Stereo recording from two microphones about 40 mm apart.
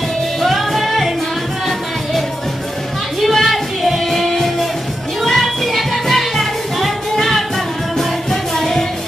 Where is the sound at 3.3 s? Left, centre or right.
Centre.